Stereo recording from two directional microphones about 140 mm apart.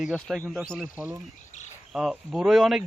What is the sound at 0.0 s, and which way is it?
Speech, centre (ahead or behind).